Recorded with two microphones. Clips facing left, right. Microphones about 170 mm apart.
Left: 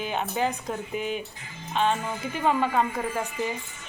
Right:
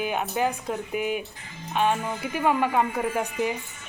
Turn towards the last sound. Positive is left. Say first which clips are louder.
# right 3 dB
turn(degrees=-10)  # may be behind; listen again after turning